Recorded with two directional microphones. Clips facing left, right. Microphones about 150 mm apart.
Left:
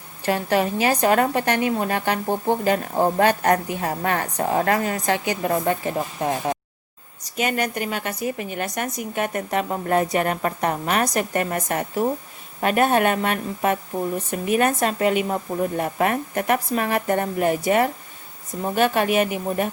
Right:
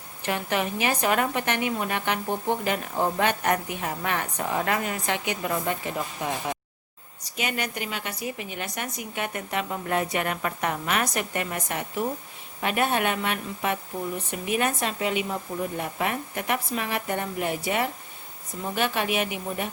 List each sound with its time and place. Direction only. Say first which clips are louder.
0.3 s a woman's voice: left 6 dB; 35° left (ahead or behind)